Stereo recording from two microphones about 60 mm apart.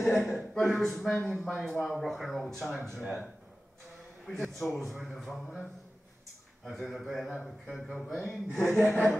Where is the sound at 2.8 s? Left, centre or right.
Right.